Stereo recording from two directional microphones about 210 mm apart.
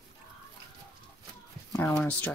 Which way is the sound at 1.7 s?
5° left (ahead or behind).